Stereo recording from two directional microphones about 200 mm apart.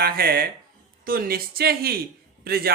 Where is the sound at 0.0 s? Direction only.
50° right (ahead or behind).